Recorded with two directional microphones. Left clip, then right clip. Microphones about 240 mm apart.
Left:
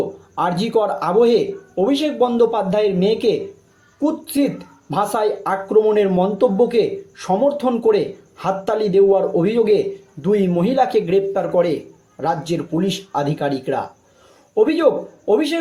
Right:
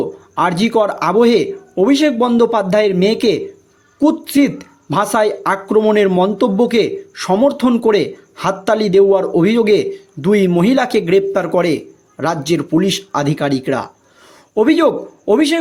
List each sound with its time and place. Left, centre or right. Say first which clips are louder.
0.3 s a woman's voice: right 4 dB; right